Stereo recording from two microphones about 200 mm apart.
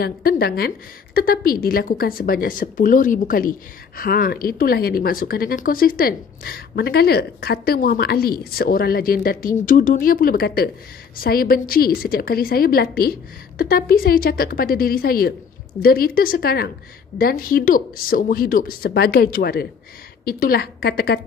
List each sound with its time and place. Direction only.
0.0 s a woman's voice: 50° left (ahead or behind)